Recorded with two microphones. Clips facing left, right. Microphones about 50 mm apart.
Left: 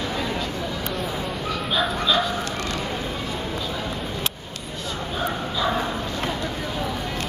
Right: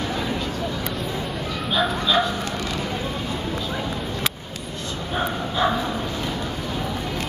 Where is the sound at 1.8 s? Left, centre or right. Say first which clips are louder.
Right 2 dB; centre.